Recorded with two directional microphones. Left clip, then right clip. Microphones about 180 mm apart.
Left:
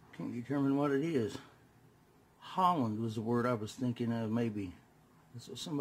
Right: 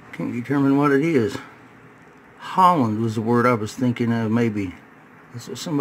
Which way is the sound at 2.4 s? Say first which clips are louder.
Right 15 dB; centre (ahead or behind).